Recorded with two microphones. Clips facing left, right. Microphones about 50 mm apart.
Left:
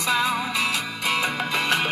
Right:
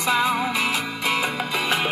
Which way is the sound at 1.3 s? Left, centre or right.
Centre.